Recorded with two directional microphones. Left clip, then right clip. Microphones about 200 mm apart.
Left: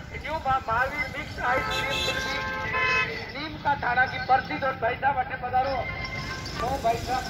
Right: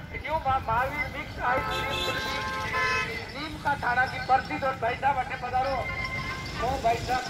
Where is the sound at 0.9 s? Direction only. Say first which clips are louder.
Left 1 dB; 45° left (ahead or behind).